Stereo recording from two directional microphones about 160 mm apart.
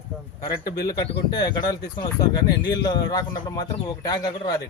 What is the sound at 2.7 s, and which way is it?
Speech, 25° left (ahead or behind).